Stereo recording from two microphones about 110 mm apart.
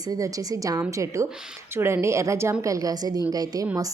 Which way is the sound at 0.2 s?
30° right (ahead or behind).